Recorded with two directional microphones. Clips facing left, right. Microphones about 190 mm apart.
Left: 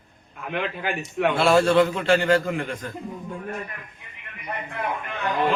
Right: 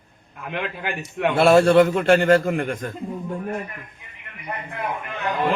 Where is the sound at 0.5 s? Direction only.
5° right (ahead or behind).